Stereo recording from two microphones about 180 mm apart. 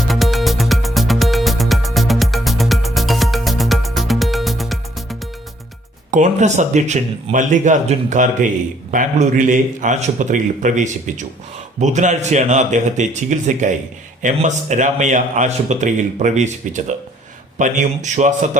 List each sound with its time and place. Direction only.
0.1 s music: centre (ahead or behind)
6.1 s a man's voice: 45° right (ahead or behind)